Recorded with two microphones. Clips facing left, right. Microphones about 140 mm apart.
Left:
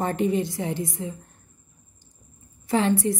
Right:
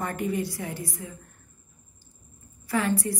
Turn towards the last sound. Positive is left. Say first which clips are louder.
# left 4 dB
turn(degrees=20)  # may be behind; listen again after turning